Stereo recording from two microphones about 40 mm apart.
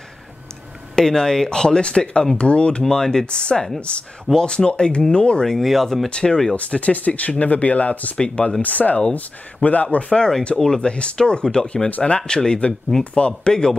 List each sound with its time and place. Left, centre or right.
0.9 s speech: centre
2.8 s speech: centre
3.3 s speech: left
5.6 s speech: centre
6.0 s speech: left
6.5 s speech: left
8.2 s speech: left
8.6 s speech: left
10.6 s speech: centre
10.9 s speech: left
13.0 s speech: left
13.5 s speech: centre